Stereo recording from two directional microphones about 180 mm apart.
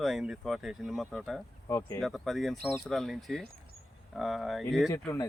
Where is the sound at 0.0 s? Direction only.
Centre (ahead or behind).